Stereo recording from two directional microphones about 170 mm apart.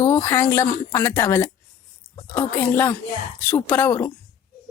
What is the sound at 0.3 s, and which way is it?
A woman's voice, 15° left (ahead or behind).